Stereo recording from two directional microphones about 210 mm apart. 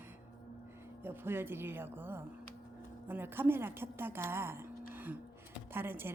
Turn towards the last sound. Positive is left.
turn(degrees=-10)  # may be behind; listen again after turning